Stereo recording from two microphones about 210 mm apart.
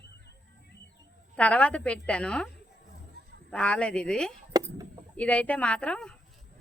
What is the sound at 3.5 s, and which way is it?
Speech, 5° left (ahead or behind).